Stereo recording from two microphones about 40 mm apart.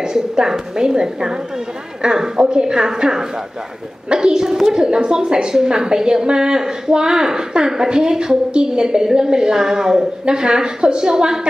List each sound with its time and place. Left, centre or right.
0.0 s a woman's voice: centre